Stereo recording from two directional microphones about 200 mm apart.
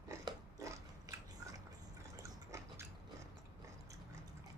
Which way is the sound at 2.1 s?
15° right (ahead or behind).